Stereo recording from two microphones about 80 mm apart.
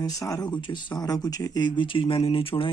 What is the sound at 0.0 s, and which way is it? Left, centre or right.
Speech, left.